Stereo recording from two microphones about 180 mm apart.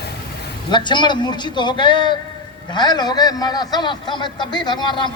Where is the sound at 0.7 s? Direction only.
25° left (ahead or behind).